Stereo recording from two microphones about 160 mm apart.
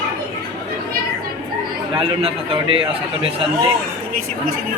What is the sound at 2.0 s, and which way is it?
Speech, 35° right (ahead or behind).